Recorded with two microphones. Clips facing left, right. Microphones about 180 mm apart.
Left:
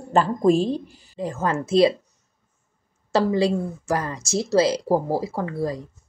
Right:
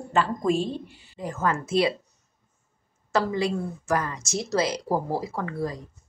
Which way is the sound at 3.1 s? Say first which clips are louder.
Left 5 dB; 30° left (ahead or behind).